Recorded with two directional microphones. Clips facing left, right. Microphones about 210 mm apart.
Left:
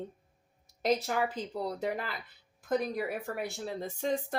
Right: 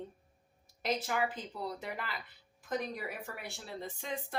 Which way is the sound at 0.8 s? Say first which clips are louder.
Left 4 dB; 45° left (ahead or behind).